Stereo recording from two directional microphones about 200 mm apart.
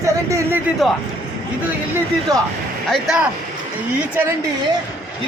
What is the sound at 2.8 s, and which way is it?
Speech, centre (ahead or behind).